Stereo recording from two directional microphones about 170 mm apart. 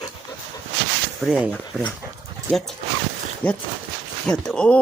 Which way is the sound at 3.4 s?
10° left (ahead or behind).